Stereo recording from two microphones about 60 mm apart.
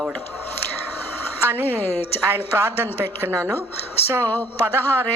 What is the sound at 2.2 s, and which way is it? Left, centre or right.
A woman's voice, right.